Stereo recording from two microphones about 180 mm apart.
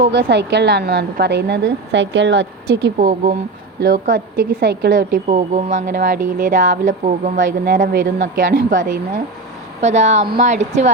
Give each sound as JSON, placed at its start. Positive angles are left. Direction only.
{"t": 0.2, "sound": "a woman's voice", "side_deg": -70}
{"t": 3.8, "sound": "speech", "side_deg": -60}